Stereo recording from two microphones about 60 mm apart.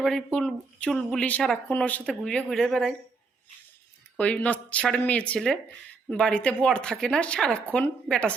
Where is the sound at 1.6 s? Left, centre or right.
Left.